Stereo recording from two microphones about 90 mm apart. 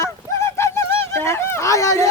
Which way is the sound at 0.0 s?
30° left (ahead or behind).